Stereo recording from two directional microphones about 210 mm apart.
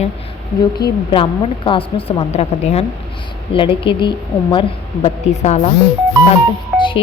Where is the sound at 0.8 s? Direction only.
20° left (ahead or behind).